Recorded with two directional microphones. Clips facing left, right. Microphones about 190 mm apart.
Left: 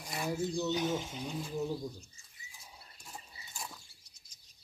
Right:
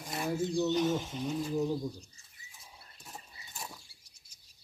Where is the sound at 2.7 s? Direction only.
5° right (ahead or behind).